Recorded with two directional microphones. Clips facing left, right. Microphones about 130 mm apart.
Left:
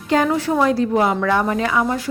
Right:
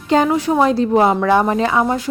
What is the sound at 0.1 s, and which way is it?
A woman's voice, 20° right (ahead or behind).